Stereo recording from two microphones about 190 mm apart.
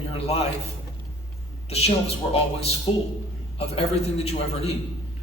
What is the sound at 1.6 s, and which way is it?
Speech, 35° left (ahead or behind).